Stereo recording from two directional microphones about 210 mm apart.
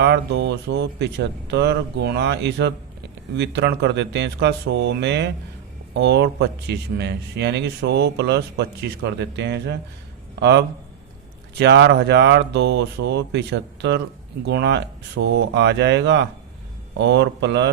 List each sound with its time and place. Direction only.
0.0 s a man's voice: 55° right (ahead or behind)